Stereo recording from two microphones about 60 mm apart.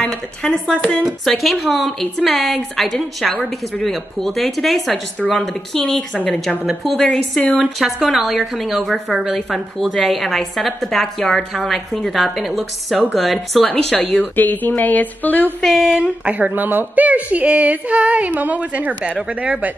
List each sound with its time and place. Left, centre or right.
0.0 s speech: centre
1.0 s a woman's voice: centre
6.8 s a woman's voice: centre
7.1 s speech: centre
7.5 s a woman's voice: centre
13.7 s speech: centre
14.2 s speech: left
15.9 s speech: right